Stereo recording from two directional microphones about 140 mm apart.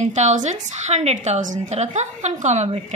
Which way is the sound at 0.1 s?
55° right (ahead or behind).